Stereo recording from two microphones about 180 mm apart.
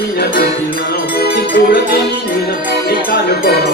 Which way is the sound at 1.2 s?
55° left (ahead or behind).